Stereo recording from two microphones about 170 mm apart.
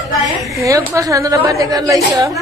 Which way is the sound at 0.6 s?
20° right (ahead or behind).